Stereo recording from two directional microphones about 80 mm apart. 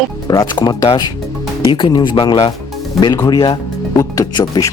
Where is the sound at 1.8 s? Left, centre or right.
Left.